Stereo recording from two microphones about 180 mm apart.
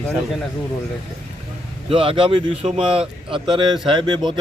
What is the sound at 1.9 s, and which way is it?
Speech, 30° right (ahead or behind).